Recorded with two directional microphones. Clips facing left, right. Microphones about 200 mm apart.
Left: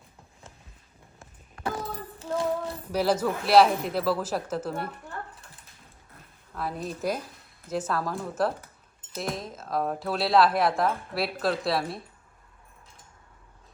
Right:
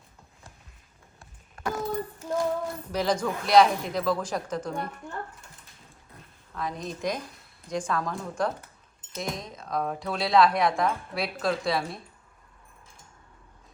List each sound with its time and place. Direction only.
1.2 s music: 30° left (ahead or behind)
2.9 s a woman's voice: 5° left (ahead or behind)
6.5 s a woman's voice: 5° left (ahead or behind)